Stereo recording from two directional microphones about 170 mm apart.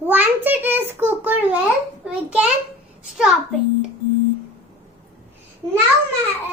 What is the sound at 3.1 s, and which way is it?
Speech, 5° right (ahead or behind).